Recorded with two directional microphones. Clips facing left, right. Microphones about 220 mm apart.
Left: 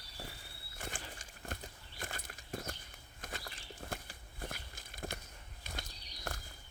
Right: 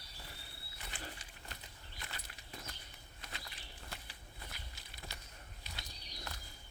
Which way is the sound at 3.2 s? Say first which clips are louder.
Left 6 dB; 50° left (ahead or behind).